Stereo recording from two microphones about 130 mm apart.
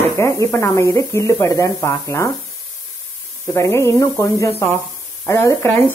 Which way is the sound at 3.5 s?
20° left (ahead or behind).